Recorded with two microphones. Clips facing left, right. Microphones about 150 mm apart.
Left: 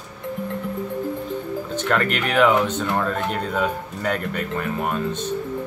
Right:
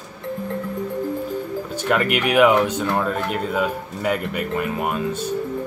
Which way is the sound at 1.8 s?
10° right (ahead or behind).